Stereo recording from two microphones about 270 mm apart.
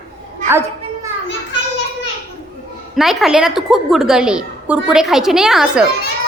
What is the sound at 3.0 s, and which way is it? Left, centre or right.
A woman's voice, centre.